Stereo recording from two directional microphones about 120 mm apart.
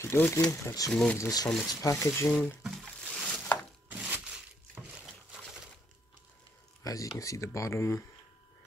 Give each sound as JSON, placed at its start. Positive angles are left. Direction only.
{"t": 0.0, "sound": "speech", "side_deg": 20}
{"t": 1.5, "sound": "speech", "side_deg": 0}
{"t": 1.8, "sound": "speech", "side_deg": 25}
{"t": 2.6, "sound": "a sound", "side_deg": -5}
{"t": 6.8, "sound": "speech", "side_deg": 30}